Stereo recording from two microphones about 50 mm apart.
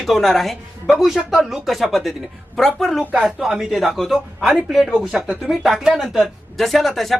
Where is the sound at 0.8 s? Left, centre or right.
Centre.